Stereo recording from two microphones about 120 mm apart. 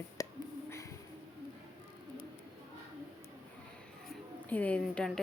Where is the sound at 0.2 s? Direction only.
30° left (ahead or behind).